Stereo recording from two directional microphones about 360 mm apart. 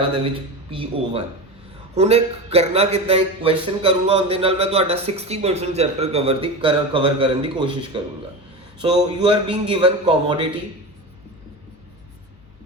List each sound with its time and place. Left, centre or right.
0.7 s a man's voice: centre